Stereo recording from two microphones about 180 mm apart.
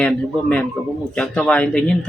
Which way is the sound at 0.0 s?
5° left (ahead or behind).